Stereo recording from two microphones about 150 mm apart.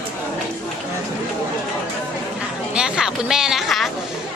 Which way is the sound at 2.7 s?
5° right (ahead or behind).